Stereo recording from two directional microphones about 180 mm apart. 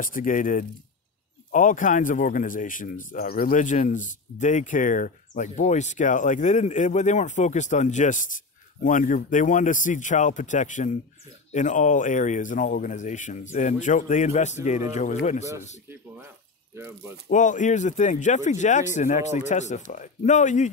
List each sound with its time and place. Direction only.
0.0 s speech: 50° left (ahead or behind)
16.7 s speech: 15° right (ahead or behind)
17.3 s speech: 45° left (ahead or behind)